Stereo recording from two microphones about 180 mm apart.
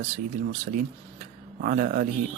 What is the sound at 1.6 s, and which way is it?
Speech, 50° right (ahead or behind).